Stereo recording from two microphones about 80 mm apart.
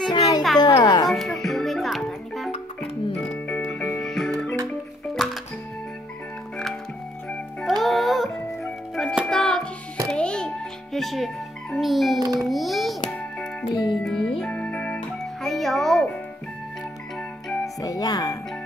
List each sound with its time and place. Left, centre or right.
0.1 s music: left
1.0 s music: centre
7.6 s music: centre
12.2 s a sound: right
12.4 s a sound: centre
13.1 s music: centre
13.7 s music: left
14.0 s music: centre
17.7 s music: left